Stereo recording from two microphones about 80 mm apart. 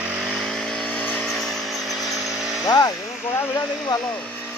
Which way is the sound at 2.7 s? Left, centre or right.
Left.